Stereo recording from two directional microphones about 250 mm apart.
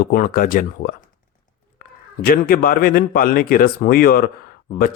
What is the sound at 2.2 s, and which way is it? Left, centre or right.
Speech, left.